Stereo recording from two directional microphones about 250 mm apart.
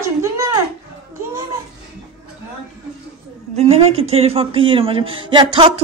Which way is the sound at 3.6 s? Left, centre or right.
Right.